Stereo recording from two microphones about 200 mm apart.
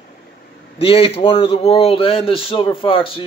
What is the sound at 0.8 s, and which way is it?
Speech, 30° left (ahead or behind).